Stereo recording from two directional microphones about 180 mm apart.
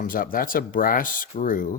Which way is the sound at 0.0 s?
50° left (ahead or behind).